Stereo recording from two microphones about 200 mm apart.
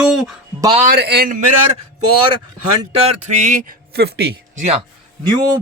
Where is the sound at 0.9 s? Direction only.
55° right (ahead or behind).